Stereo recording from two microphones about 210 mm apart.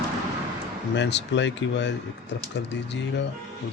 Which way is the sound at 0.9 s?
55° left (ahead or behind).